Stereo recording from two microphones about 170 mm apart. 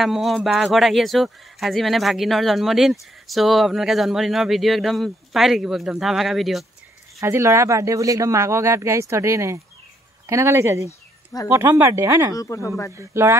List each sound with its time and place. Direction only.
0.0 s speech: centre (ahead or behind)
7.2 s speech: 15° right (ahead or behind)
12.4 s speech: 20° left (ahead or behind)
12.9 s speech: 15° right (ahead or behind)